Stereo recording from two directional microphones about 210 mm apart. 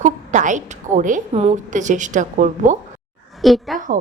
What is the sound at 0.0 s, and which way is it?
A woman's voice, 35° right (ahead or behind).